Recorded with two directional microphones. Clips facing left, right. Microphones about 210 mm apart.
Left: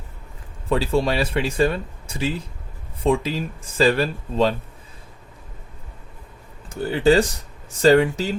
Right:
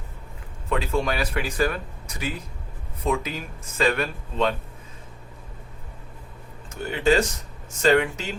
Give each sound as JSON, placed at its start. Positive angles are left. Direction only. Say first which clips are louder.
{"t": 0.7, "sound": "speech", "louder": "left 4 dB", "side_deg": 30}
{"t": 6.7, "sound": "speech", "louder": "left 4 dB", "side_deg": 35}